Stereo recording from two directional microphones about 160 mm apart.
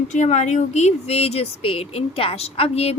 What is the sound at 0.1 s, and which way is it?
A woman's voice, 45° left (ahead or behind).